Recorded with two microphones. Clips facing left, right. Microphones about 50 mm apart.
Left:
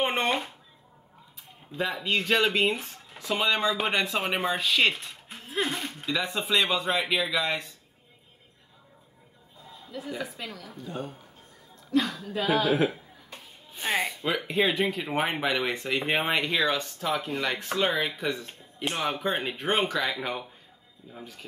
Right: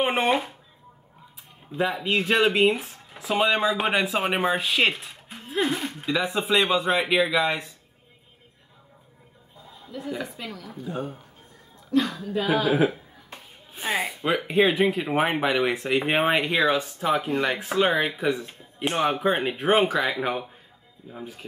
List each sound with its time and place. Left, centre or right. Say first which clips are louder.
0.0 s a sound: right 4 dB; centre
1.7 s speech: right 4 dB; centre
9.8 s a woman's voice: right 3 dB; centre
18.9 s speech: right 6 dB; centre
19.2 s speech: right 6 dB; centre